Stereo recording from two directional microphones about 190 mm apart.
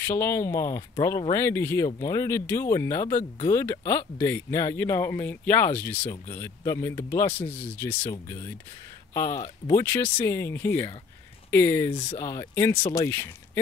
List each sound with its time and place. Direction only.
0.0 s speech: 15° left (ahead or behind)
11.9 s speech: 25° left (ahead or behind)
12.2 s speech: 15° left (ahead or behind)